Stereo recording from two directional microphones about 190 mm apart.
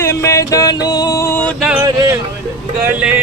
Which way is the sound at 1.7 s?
15° right (ahead or behind).